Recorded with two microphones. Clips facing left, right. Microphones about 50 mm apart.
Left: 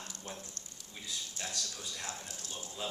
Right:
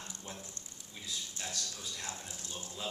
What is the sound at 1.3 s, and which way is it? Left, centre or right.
A man's voice, centre.